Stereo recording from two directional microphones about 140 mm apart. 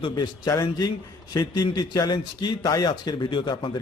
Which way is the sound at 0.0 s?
30° left (ahead or behind).